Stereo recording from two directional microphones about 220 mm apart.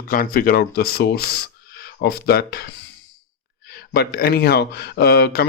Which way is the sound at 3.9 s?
45° left (ahead or behind).